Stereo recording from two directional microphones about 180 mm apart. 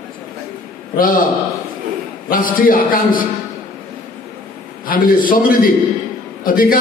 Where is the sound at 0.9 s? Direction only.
50° left (ahead or behind).